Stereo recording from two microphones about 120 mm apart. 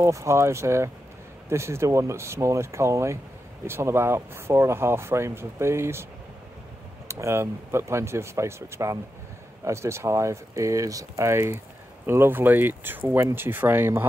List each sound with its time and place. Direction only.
0.0 s speech: 25° right (ahead or behind)
7.1 s speech: 25° right (ahead or behind)